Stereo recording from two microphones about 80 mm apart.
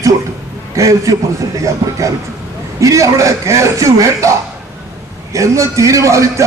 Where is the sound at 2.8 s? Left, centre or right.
Right.